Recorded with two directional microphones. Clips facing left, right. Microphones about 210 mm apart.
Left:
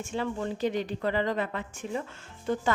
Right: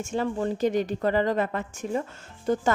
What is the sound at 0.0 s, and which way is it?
A woman's voice, 45° right (ahead or behind).